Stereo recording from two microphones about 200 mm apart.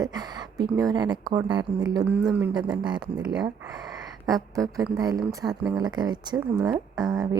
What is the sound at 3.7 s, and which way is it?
Speech, 20° right (ahead or behind).